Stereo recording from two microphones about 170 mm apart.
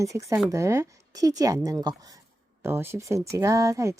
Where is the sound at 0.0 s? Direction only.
20° right (ahead or behind).